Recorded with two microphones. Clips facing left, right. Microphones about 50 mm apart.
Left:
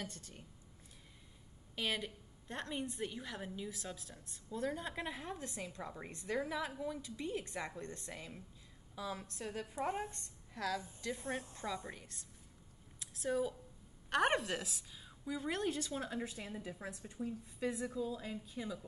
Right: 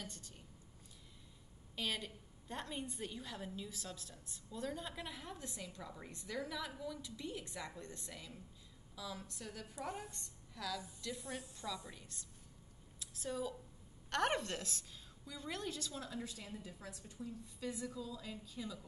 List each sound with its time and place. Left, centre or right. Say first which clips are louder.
1.8 s a woman's voice: left 3 dB; left
2.4 s a woman's voice: left 2 dB; centre
2.7 s a woman's voice: left 4 dB; left
13.3 s a woman's voice: left 6 dB; centre